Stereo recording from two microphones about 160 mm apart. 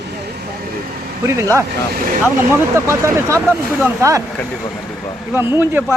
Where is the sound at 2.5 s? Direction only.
15° right (ahead or behind).